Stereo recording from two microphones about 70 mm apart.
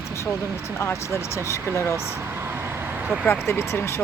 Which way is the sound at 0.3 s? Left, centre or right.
Right.